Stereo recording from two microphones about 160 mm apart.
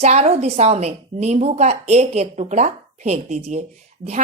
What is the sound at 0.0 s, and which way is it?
A woman's voice, 40° right (ahead or behind).